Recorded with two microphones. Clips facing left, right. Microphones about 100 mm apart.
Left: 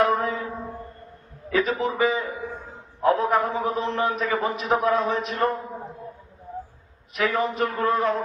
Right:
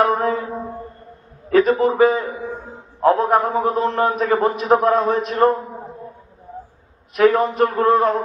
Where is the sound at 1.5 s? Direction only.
50° right (ahead or behind).